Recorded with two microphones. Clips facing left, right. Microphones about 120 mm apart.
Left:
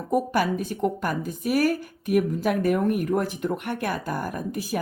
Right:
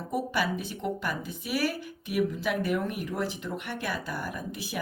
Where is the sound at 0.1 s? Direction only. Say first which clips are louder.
Left 6 dB; 45° left (ahead or behind).